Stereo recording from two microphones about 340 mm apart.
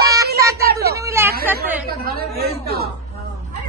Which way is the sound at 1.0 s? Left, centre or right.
Centre.